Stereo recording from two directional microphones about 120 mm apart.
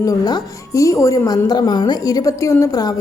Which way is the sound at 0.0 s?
30° left (ahead or behind).